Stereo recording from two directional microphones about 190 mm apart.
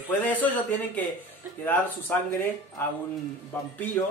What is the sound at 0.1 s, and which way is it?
Speech, 10° left (ahead or behind).